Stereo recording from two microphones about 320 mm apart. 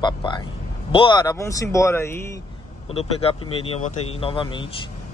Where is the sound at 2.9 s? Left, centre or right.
Centre.